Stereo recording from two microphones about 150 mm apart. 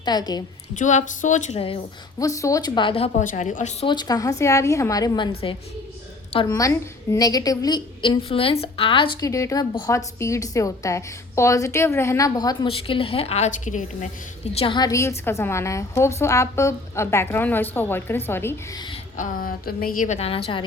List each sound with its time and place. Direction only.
0.0 s a woman's voice: 25° left (ahead or behind)
0.8 s a woman's voice: 55° left (ahead or behind)
1.5 s a woman's voice: 35° left (ahead or behind)
2.1 s a woman's voice: 20° left (ahead or behind)
3.2 s a woman's voice: 50° left (ahead or behind)
3.8 s a woman's voice: 25° left (ahead or behind)
6.4 s a woman's voice: 25° left (ahead or behind)
9.2 s a woman's voice: 20° left (ahead or behind)
12.6 s a woman's voice: 40° left (ahead or behind); by 14.1 s 55° left (ahead or behind)
14.5 s a woman's voice: 40° left (ahead or behind)
14.8 s a woman's voice: 20° left (ahead or behind)
19.1 s a woman's voice: 65° left (ahead or behind); by 20.7 s 35° left (ahead or behind)